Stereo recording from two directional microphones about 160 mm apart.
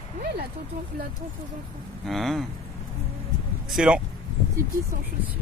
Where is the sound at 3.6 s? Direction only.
5° right (ahead or behind).